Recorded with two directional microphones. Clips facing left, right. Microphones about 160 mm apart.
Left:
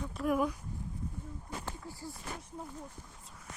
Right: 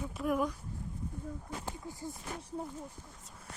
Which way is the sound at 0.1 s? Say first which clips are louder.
Left 2 dB; centre (ahead or behind).